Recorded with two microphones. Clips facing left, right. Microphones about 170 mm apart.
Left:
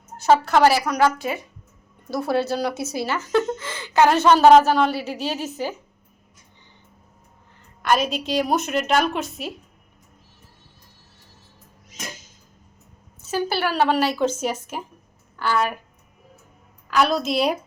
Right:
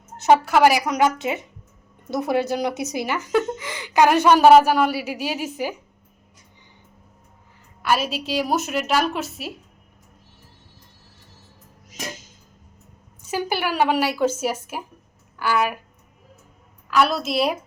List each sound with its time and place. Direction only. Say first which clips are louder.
0.2 s a woman's voice: right 1 dB; 15° right (ahead or behind)
7.8 s a woman's voice: left 1 dB; 5° right (ahead or behind)
13.2 s a woman's voice: left 1 dB; 15° right (ahead or behind)
16.9 s a woman's voice: even; centre (ahead or behind)